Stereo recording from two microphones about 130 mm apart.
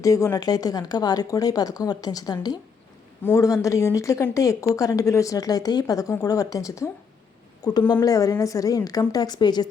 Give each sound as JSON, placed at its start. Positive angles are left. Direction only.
{"t": 0.0, "sound": "a woman's voice", "side_deg": 25}